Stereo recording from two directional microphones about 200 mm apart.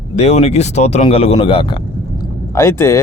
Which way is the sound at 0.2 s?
30° left (ahead or behind).